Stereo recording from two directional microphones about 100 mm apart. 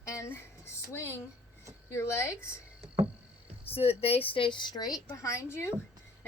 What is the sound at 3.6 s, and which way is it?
Speech, 80° left.